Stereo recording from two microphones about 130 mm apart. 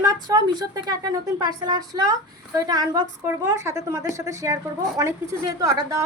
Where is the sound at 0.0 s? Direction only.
30° right (ahead or behind).